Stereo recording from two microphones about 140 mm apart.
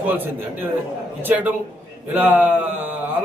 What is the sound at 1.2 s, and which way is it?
A man's voice, 15° right (ahead or behind).